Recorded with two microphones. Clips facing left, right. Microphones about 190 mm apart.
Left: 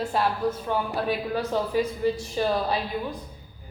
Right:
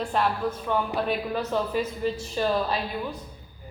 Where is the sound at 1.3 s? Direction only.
10° left (ahead or behind).